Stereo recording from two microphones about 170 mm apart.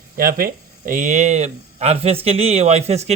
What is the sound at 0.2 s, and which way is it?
Speech, 55° right (ahead or behind).